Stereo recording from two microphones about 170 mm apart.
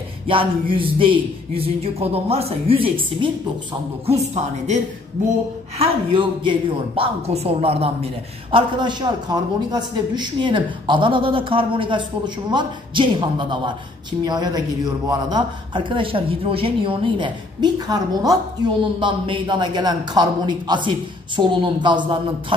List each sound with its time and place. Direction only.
0.3 s a woman's voice: 30° right (ahead or behind)
4.3 s a woman's voice: 40° right (ahead or behind)
5.8 s a woman's voice: 30° right (ahead or behind)